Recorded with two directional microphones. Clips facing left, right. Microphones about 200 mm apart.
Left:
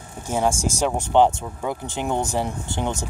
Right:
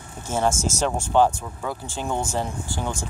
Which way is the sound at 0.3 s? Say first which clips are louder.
Left 1 dB; 15° left (ahead or behind).